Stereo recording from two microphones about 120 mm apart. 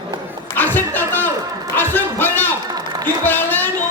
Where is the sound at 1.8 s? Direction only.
15° left (ahead or behind).